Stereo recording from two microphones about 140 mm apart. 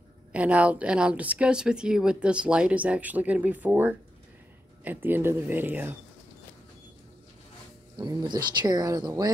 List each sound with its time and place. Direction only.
0.3 s a woman's voice: 10° right (ahead or behind)
7.9 s speech: 30° right (ahead or behind)